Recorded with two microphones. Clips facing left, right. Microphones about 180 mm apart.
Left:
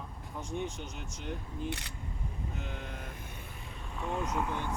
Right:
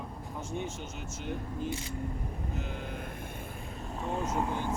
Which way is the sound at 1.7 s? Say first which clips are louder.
Right 3 dB; 70° left (ahead or behind).